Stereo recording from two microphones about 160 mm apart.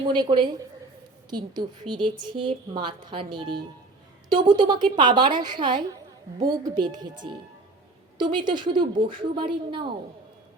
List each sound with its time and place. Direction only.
0.0 s a woman's voice: 30° right (ahead or behind)